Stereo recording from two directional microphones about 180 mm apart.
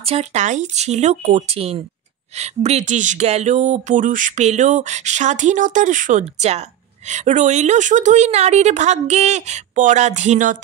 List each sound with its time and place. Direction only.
0.0 s speech: 35° right (ahead or behind)